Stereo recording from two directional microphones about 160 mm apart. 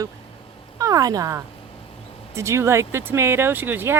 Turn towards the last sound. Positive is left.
turn(degrees=-15)  # may be behind; listen again after turning